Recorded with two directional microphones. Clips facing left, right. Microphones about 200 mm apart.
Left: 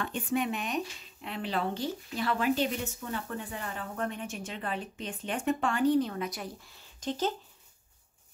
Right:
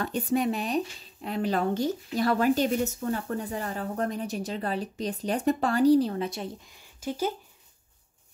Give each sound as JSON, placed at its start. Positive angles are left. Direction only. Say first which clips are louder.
{"t": 0.0, "sound": "speech", "louder": "right 5 dB", "side_deg": -40}